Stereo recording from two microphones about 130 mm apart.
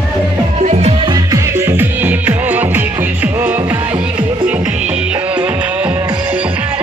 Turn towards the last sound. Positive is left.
turn(degrees=-10)  # may be behind; listen again after turning